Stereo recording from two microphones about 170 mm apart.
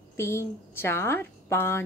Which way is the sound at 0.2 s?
15° left (ahead or behind).